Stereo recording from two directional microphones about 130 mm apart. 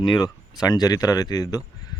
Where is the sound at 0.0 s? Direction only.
30° left (ahead or behind).